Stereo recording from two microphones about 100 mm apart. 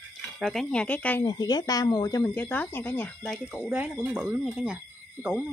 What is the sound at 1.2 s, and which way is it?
Speech, 40° left (ahead or behind).